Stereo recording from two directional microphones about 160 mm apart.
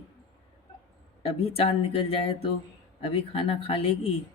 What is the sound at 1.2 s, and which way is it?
Speech, 40° left (ahead or behind).